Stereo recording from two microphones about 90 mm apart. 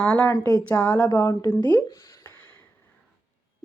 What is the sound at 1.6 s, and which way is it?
Speech, 50° left (ahead or behind).